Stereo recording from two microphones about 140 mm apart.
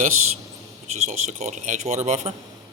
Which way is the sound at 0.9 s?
55° right (ahead or behind).